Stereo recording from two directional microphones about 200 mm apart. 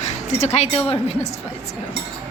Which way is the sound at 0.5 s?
35° left (ahead or behind).